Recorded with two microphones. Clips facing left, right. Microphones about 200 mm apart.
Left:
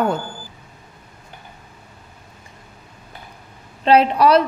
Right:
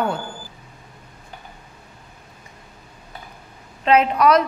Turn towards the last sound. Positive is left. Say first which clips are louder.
# left 2 dB
turn(degrees=30)  # may be behind; listen again after turning